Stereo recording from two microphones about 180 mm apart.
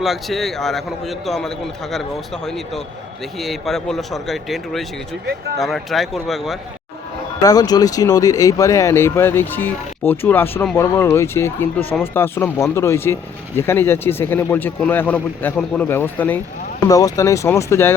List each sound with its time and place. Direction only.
0.0 s a man's voice: centre (ahead or behind)
7.4 s speech: 20° left (ahead or behind)